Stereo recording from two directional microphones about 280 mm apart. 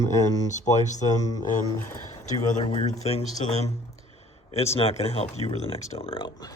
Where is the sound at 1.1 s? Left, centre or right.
Centre.